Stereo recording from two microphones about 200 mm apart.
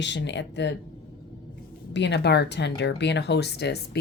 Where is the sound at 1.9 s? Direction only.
60° left (ahead or behind).